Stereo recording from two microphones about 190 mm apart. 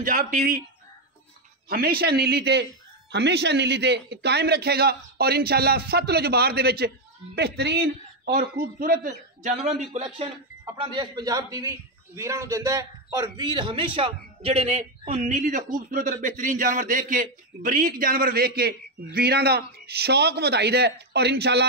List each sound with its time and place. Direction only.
0.0 s a man's voice: 45° right (ahead or behind)
1.7 s a man's voice: 50° right (ahead or behind)
10.8 s a man's voice: 25° right (ahead or behind); by 21.6 s 60° right (ahead or behind)